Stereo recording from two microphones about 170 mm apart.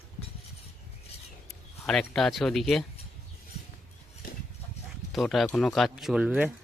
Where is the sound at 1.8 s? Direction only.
5° left (ahead or behind).